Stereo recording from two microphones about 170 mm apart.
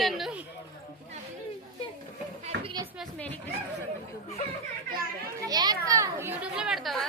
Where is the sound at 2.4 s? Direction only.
30° right (ahead or behind).